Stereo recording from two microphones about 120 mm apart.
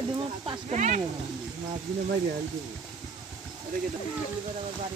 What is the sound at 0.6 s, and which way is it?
Speech, 80° right.